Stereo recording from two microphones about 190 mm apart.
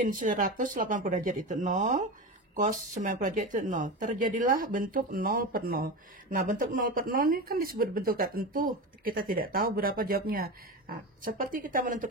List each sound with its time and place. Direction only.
0.0 s speech: 45° right (ahead or behind)